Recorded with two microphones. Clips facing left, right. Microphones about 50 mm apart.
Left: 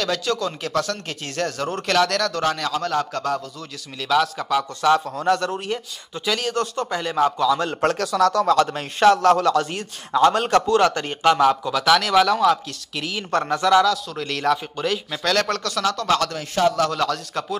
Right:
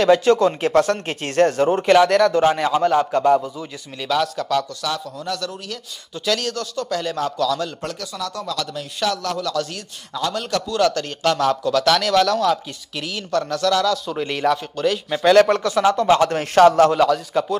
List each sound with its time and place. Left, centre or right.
0.0 s speech: right
1.7 s a man's voice: centre
4.0 s speech: centre
4.8 s a man's voice: left
6.1 s speech: centre
6.5 s a man's voice: left
7.0 s speech: centre
7.8 s a man's voice: left; by 13.2 s centre
13.3 s speech: left
13.8 s speech: centre
15.0 s speech: centre
16.3 s a man's voice: right
16.9 s a man's voice: centre